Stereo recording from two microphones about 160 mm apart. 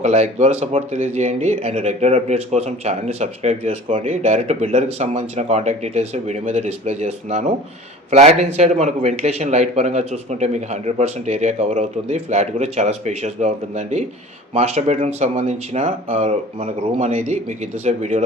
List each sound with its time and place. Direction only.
0.0 s a man's voice: 45° right (ahead or behind)